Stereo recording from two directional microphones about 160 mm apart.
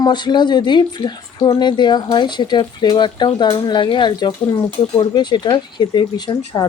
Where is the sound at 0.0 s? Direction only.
25° left (ahead or behind).